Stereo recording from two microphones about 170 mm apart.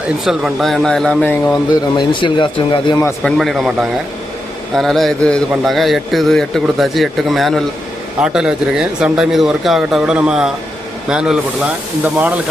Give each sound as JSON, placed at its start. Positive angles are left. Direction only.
{"t": 0.3, "sound": "a man's voice", "side_deg": 0}
{"t": 2.0, "sound": "speech", "side_deg": 30}
{"t": 3.2, "sound": "a man's voice", "side_deg": 0}